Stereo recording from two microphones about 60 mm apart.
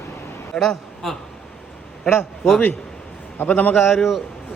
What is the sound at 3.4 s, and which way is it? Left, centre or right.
Speech, left.